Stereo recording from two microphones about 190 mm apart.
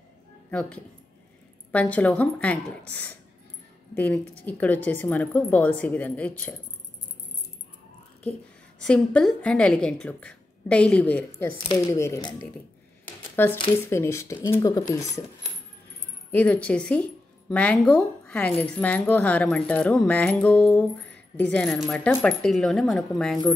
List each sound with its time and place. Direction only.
0.5 s speech: 5° left (ahead or behind)
3.9 s speech: 10° left (ahead or behind)
8.2 s a woman's voice: 5° left (ahead or behind)
13.4 s speech: 10° left (ahead or behind)
16.3 s a woman's voice: 10° left (ahead or behind)